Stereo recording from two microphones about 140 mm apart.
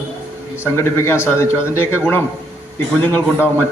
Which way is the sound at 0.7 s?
15° left (ahead or behind).